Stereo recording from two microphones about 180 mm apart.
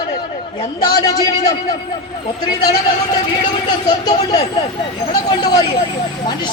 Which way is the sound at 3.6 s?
20° left (ahead or behind).